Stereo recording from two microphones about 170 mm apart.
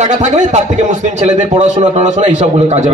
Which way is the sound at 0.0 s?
45° right (ahead or behind).